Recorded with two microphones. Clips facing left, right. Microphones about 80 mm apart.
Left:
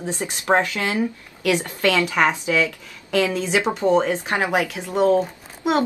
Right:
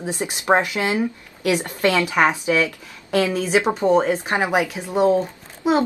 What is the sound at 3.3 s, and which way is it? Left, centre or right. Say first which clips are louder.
A woman's voice: right 2 dB; centre.